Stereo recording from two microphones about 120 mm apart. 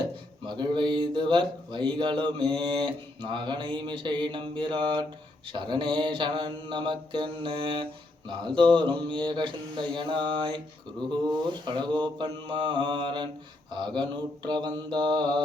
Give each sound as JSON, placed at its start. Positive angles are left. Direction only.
{"t": 0.4, "sound": "mantra", "side_deg": -40}